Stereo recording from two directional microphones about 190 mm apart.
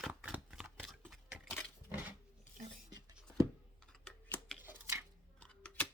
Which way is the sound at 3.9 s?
5° left (ahead or behind).